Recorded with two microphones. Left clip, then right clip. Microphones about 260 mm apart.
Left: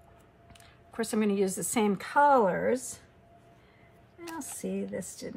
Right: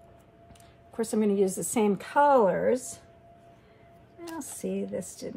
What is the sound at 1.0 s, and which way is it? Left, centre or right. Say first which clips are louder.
Speech: right 3 dB; centre.